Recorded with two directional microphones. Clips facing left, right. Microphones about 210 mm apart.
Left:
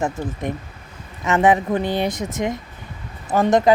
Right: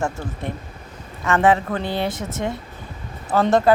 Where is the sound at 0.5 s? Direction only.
15° left (ahead or behind).